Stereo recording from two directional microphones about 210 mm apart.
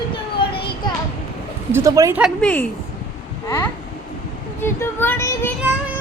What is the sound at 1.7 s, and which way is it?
Speech, 15° right (ahead or behind).